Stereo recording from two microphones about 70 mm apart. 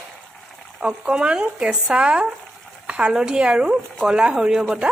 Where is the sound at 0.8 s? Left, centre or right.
Centre.